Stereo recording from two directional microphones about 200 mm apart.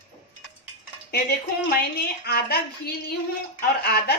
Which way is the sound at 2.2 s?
50° left (ahead or behind).